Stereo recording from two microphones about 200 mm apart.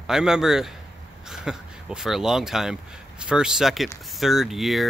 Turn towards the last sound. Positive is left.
turn(degrees=0)  # may be behind; listen again after turning